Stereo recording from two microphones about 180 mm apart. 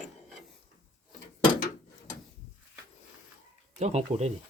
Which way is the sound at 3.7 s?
40° right (ahead or behind).